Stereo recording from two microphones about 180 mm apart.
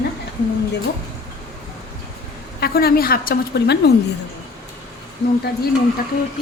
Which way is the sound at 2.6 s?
55° left (ahead or behind).